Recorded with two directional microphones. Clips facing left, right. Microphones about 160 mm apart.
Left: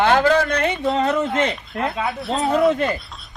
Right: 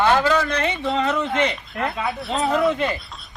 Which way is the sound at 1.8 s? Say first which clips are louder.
Left 1 dB; centre (ahead or behind).